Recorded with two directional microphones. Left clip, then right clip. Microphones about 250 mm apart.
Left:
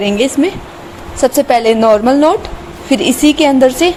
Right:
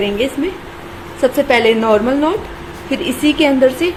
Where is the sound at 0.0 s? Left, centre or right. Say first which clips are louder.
Left 4 dB; left.